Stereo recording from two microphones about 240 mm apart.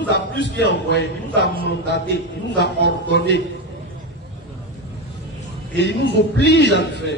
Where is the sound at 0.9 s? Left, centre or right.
Left.